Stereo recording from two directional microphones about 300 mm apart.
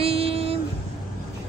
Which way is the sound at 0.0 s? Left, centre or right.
Centre.